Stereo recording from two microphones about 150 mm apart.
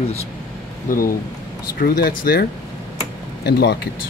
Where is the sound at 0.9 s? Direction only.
65° left (ahead or behind).